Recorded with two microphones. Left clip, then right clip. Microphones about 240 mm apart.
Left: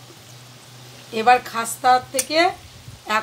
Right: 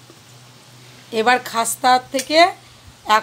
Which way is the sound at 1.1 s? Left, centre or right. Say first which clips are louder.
Even; right.